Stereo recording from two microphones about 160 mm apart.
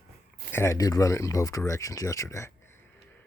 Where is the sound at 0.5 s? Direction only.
15° left (ahead or behind).